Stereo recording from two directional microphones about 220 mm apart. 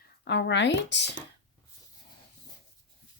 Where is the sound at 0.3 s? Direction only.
55° left (ahead or behind).